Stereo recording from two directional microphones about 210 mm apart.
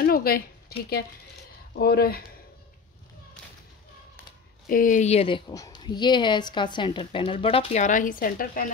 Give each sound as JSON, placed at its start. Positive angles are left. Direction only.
{"t": 0.0, "sound": "speech", "side_deg": 45}
{"t": 4.6, "sound": "speech", "side_deg": 40}
{"t": 5.5, "sound": "speech", "side_deg": 20}